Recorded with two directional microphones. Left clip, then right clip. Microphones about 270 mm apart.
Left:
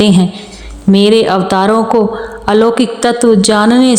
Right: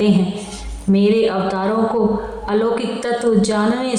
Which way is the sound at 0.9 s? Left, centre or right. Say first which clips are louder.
Left 7 dB; left.